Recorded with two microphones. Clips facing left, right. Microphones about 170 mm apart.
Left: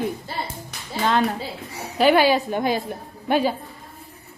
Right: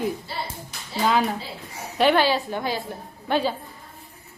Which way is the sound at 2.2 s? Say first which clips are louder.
Left 4 dB; 15° left (ahead or behind).